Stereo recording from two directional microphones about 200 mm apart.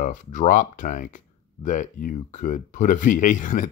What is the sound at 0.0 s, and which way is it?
Speech, 40° left (ahead or behind).